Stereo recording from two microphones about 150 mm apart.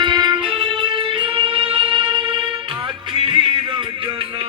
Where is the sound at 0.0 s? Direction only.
30° right (ahead or behind).